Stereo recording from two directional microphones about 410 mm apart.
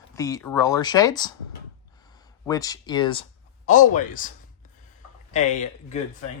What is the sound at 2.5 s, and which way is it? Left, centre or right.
Speech, centre.